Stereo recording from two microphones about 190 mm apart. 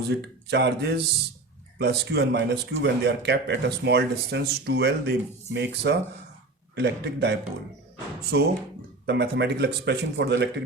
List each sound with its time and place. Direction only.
0.1 s speech: 60° right (ahead or behind)